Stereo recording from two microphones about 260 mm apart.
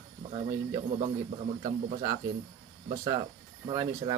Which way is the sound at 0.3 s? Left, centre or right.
Centre.